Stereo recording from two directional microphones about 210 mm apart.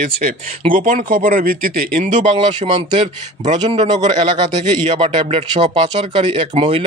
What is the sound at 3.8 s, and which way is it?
Speech, 20° right (ahead or behind).